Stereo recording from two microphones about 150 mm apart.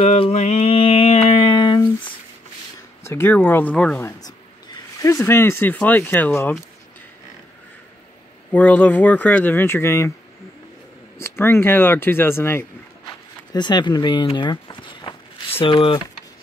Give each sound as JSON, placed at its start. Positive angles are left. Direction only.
{"t": 0.0, "sound": "mantra", "side_deg": 45}
{"t": 3.0, "sound": "speech", "side_deg": 15}
{"t": 5.0, "sound": "speech", "side_deg": 20}
{"t": 8.5, "sound": "speech", "side_deg": 10}
{"t": 11.1, "sound": "speech", "side_deg": 15}
{"t": 13.5, "sound": "speech", "side_deg": 30}